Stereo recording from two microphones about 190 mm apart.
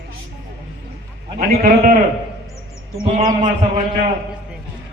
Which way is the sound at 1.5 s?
40° right (ahead or behind).